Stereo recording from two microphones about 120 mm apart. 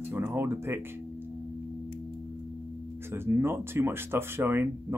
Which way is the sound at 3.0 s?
20° right (ahead or behind).